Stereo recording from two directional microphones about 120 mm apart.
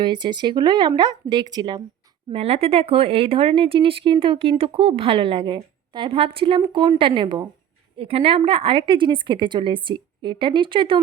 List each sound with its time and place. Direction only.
0.0 s speech: 40° right (ahead or behind)
2.3 s speech: 55° right (ahead or behind)